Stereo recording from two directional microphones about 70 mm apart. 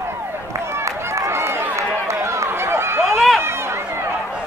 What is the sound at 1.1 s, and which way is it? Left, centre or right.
Run, right.